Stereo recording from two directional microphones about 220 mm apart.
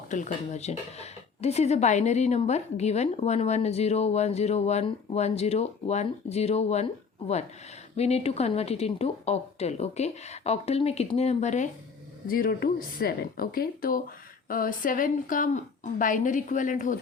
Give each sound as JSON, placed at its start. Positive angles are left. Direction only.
{"t": 0.1, "sound": "a woman's voice", "side_deg": 35}